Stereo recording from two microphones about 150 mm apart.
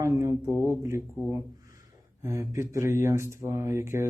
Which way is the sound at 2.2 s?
20° right (ahead or behind).